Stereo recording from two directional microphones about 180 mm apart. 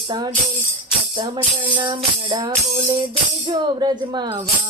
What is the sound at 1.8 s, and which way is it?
Speech, 25° right (ahead or behind).